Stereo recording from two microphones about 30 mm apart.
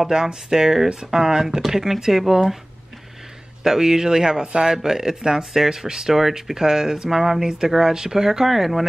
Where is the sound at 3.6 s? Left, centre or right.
Centre.